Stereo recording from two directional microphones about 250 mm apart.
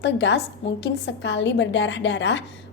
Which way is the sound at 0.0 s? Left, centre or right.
Left.